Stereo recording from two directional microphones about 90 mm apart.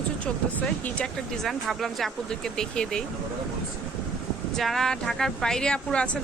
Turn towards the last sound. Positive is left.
turn(degrees=10)  # may be behind; listen again after turning